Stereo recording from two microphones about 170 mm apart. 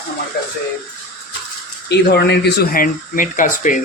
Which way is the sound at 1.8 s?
75° left (ahead or behind).